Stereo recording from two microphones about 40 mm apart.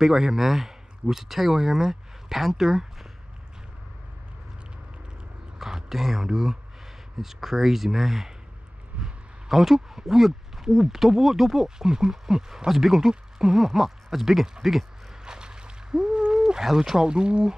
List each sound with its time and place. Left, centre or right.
0.0 s speech: centre
5.6 s speech: centre
9.5 s speech: centre
15.2 s a sound: centre
16.6 s speech: centre